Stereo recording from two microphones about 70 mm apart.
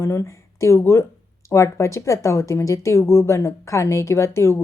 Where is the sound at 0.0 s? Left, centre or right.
Left.